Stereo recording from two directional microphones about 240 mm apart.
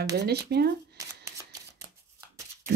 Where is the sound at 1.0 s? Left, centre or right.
Centre.